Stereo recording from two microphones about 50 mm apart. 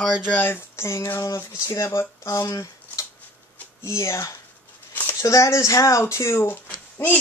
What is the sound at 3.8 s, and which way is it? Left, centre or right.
Speech, left.